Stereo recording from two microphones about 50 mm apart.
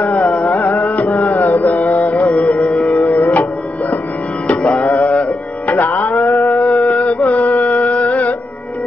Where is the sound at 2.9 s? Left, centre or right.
Left.